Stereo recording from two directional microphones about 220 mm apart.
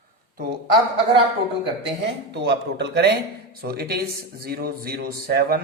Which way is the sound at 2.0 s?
50° right (ahead or behind).